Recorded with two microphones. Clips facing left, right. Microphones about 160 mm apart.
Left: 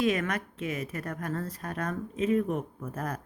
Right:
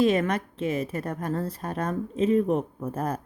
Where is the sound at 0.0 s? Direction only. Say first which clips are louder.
Right 5 dB; 30° right (ahead or behind).